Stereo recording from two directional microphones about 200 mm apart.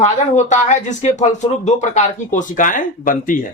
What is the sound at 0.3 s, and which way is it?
Speech, 35° left (ahead or behind).